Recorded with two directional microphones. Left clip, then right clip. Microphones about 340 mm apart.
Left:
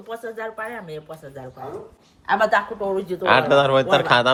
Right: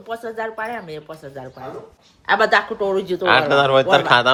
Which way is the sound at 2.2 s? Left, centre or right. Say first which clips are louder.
Right 3 dB; right.